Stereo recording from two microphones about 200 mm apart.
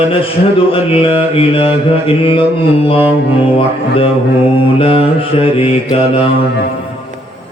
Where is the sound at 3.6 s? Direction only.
25° left (ahead or behind).